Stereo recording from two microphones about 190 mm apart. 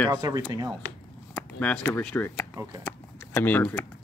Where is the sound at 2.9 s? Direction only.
10° left (ahead or behind).